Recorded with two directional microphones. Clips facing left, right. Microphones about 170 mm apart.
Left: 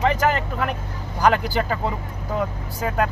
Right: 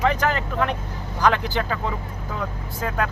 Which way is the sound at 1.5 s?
35° left (ahead or behind).